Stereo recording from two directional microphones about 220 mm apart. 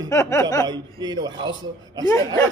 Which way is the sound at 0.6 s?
20° right (ahead or behind).